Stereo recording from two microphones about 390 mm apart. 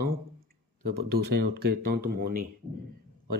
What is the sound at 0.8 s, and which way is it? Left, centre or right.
Speech, right.